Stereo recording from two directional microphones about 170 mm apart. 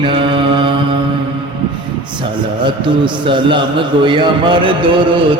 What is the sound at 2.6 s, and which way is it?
A man's voice, 30° right (ahead or behind).